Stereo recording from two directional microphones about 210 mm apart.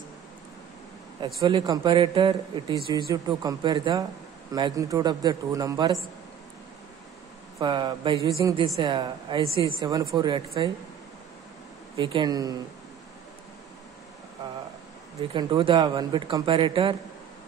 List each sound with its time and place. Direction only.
1.2 s a man's voice: 20° right (ahead or behind)
7.5 s speech: 20° right (ahead or behind)
12.0 s speech: 25° right (ahead or behind)
15.1 s speech: 25° right (ahead or behind)